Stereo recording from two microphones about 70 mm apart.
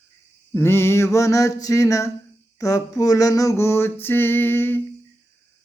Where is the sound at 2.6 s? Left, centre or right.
Left.